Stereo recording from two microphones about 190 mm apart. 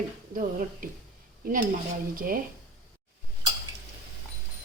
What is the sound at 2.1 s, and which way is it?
Speech, 50° right (ahead or behind).